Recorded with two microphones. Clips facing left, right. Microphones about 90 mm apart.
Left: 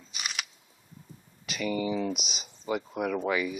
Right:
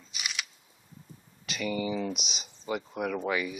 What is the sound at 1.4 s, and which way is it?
Speech, centre (ahead or behind).